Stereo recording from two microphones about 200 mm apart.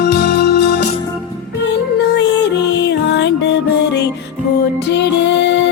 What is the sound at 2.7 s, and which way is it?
Music, 60° left (ahead or behind).